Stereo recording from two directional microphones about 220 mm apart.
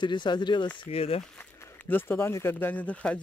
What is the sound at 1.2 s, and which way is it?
Speech, 5° left (ahead or behind).